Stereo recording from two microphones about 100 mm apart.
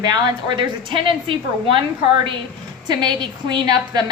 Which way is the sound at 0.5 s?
55° right (ahead or behind).